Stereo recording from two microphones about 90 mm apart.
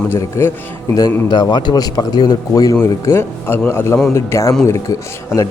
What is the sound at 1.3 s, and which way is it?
A man's voice, 60° left (ahead or behind).